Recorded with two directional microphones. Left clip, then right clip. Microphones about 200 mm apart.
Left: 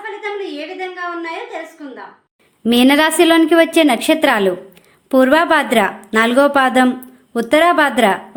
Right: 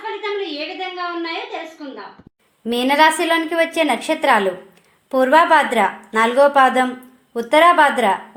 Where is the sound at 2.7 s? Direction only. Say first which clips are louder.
Left 2 dB; 35° left (ahead or behind).